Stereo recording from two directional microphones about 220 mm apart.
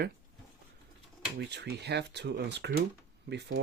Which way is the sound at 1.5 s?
50° right (ahead or behind).